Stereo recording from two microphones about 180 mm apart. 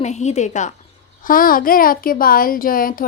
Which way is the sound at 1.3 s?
50° left (ahead or behind).